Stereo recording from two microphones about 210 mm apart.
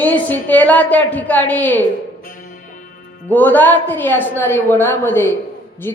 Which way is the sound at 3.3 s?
10° left (ahead or behind).